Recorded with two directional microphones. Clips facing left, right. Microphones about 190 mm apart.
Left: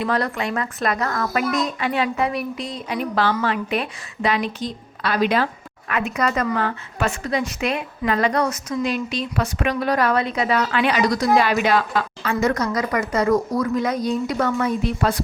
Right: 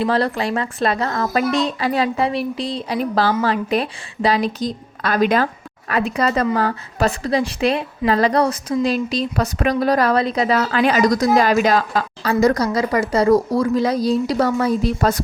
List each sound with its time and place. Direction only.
0.0 s a woman's voice: 30° right (ahead or behind)
5.9 s a woman's voice: 30° right (ahead or behind)